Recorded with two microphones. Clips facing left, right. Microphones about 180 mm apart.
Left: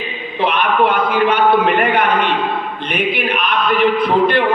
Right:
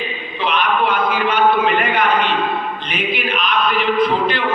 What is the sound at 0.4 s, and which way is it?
Male singing, 55° left (ahead or behind).